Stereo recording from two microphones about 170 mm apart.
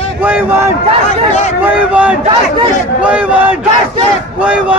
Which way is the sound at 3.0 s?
10° right (ahead or behind).